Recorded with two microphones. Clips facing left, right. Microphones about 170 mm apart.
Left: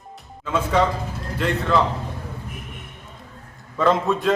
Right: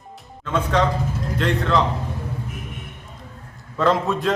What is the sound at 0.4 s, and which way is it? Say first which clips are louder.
A man's voice: even; 5° left (ahead or behind).